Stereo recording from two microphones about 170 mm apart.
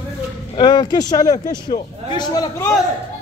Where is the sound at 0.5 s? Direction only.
25° left (ahead or behind).